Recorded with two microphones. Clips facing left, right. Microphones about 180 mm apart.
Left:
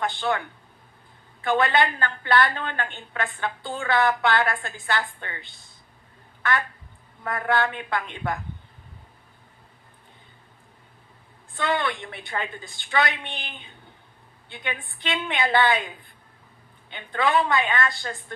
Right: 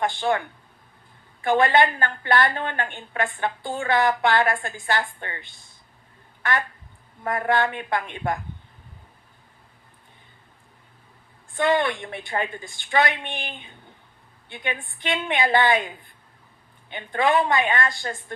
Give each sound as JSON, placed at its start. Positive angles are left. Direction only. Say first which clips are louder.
{"t": 0.0, "sound": "a woman's voice", "louder": "right 3 dB", "side_deg": -20}
{"t": 1.5, "sound": "a woman's voice", "louder": "right 3 dB", "side_deg": -20}
{"t": 7.4, "sound": "a woman's voice", "louder": "right 1 dB", "side_deg": -20}
{"t": 11.5, "sound": "a woman's voice", "louder": "right 4 dB", "side_deg": -20}
{"t": 16.9, "sound": "a woman's voice", "louder": "right 2 dB", "side_deg": -20}